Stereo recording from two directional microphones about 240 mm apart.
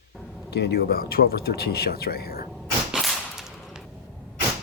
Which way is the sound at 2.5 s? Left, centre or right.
Centre.